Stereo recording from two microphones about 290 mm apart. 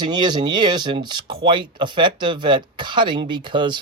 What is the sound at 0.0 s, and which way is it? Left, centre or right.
Speech, centre.